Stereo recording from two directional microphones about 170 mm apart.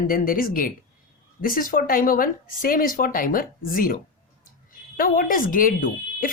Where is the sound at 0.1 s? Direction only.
55° left (ahead or behind).